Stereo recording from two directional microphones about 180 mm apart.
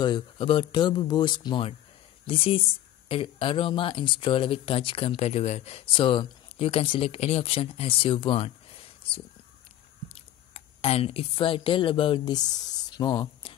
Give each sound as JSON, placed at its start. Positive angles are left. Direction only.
{"t": 0.0, "sound": "speech", "side_deg": 25}